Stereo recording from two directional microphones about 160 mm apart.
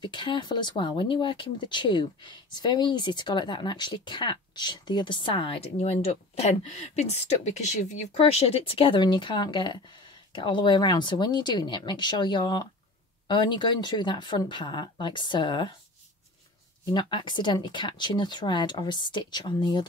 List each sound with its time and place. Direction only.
0.0 s speech: 30° left (ahead or behind)
16.9 s speech: 30° left (ahead or behind)